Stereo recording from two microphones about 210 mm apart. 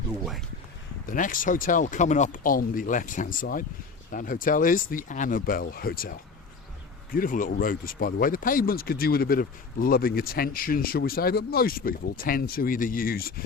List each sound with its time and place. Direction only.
1.0 s speech: 40° left (ahead or behind)